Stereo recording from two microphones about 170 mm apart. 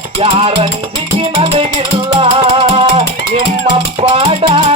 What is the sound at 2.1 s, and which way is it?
Music, 35° right (ahead or behind).